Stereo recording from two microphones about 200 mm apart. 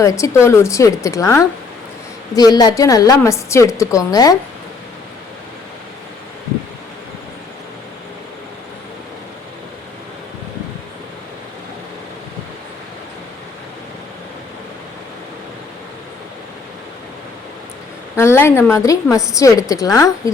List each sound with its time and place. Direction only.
0.0 s a woman's voice: 15° left (ahead or behind)
18.2 s a woman's voice: 15° left (ahead or behind)